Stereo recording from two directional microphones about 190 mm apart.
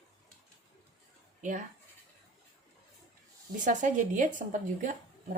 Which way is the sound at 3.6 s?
40° right (ahead or behind).